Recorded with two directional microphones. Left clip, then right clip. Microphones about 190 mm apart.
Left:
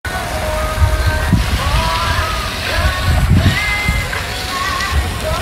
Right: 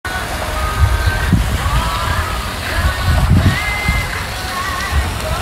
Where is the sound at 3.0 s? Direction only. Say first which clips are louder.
Even; 25° right (ahead or behind).